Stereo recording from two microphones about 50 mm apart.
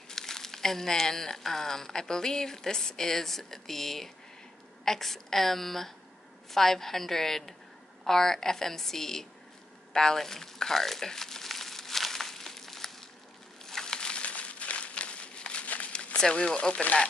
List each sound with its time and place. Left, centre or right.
0.1 s a woman's voice: centre
9.9 s crumpling: centre
16.2 s speech: centre